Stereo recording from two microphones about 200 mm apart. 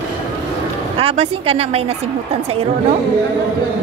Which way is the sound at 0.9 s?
30° right (ahead or behind).